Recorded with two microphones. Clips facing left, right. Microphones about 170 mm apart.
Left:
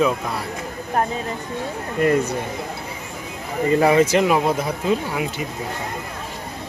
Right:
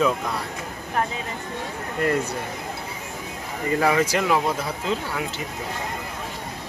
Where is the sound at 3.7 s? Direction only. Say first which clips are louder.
Left 5 dB; 25° left (ahead or behind).